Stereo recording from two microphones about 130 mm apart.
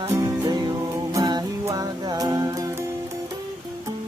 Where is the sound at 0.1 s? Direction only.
30° right (ahead or behind).